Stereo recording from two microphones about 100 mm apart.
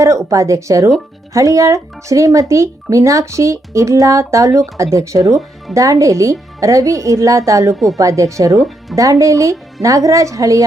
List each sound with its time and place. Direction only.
0.0 s speech: 30° right (ahead or behind)